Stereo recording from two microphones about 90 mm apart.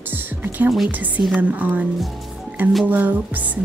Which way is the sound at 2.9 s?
20° right (ahead or behind).